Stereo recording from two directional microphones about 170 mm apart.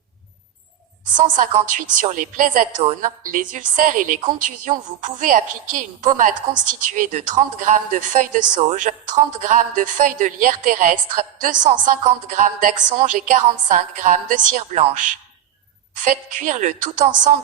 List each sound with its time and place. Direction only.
1.1 s a woman's voice: 50° right (ahead or behind)